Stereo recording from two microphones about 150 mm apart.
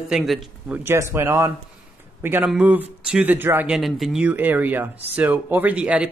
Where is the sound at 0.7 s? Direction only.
15° right (ahead or behind).